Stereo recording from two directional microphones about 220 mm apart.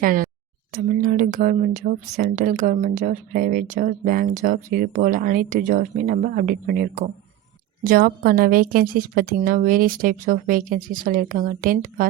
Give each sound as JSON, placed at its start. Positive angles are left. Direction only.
{"t": 0.0, "sound": "speech", "side_deg": -40}
{"t": 0.7, "sound": "a sound", "side_deg": -40}
{"t": 1.8, "sound": "speech", "side_deg": -40}